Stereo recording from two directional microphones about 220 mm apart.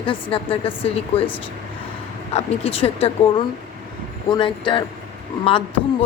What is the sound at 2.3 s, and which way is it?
A woman's voice, 25° left (ahead or behind).